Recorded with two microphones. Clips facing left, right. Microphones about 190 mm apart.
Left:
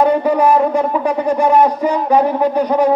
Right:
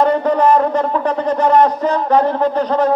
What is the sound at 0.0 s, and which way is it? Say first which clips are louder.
A man's voice: left 1 dB; 10° left (ahead or behind).